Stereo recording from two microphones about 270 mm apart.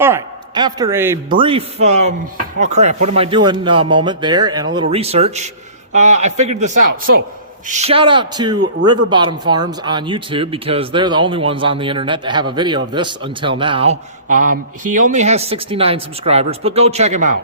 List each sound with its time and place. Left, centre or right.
0.0 s a woman's voice: centre